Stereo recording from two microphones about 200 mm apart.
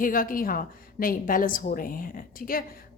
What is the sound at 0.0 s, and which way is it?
Speech, 45° left (ahead or behind).